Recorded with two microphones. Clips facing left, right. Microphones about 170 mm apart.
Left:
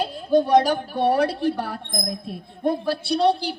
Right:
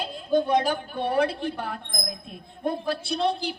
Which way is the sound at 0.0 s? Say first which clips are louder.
Left 4 dB; 40° left (ahead or behind).